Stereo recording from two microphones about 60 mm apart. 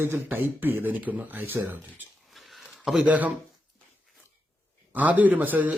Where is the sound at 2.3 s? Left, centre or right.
Centre.